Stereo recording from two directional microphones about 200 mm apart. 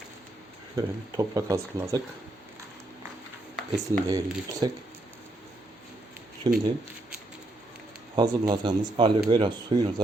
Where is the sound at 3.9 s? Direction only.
20° right (ahead or behind).